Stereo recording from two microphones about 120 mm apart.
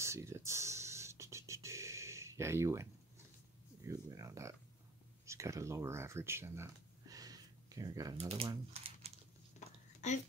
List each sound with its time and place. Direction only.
0.0 s music: 25° right (ahead or behind)
3.8 s speech: 25° right (ahead or behind)
8.2 s speech: 55° right (ahead or behind)
9.9 s a sound: 80° left